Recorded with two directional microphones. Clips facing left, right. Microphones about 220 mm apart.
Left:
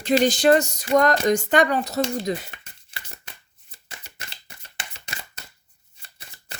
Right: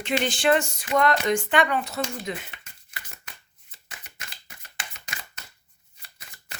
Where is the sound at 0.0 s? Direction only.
40° left (ahead or behind).